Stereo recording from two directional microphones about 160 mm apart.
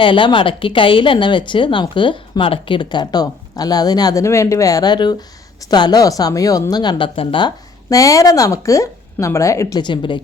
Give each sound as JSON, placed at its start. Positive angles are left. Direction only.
{"t": 0.0, "sound": "speech", "side_deg": 30}
{"t": 7.9, "sound": "speech", "side_deg": 20}